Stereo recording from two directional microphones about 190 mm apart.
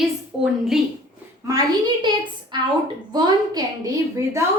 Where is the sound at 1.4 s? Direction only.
20° right (ahead or behind).